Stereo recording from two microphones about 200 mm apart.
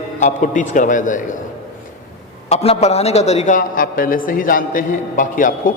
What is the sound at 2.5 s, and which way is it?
A man's voice, 30° left (ahead or behind).